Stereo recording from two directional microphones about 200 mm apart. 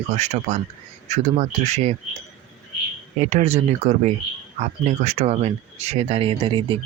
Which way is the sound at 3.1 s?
35° right (ahead or behind).